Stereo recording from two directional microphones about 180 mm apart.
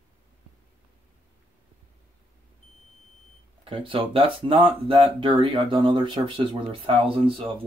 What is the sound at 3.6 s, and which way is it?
Speech, 30° right (ahead or behind).